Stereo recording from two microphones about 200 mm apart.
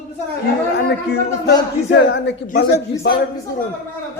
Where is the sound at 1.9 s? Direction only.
60° left (ahead or behind).